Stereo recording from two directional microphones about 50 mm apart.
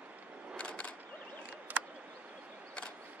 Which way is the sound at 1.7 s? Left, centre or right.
Right.